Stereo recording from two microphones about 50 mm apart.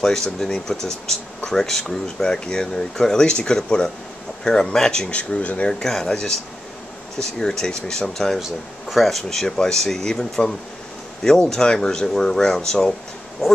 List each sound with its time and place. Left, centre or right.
0.0 s speech: centre
5.1 s speech: left
5.7 s speech: centre
8.4 s speech: centre
11.5 s speech: centre